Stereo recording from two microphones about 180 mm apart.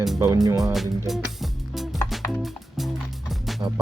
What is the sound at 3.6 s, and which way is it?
Speech, 20° right (ahead or behind).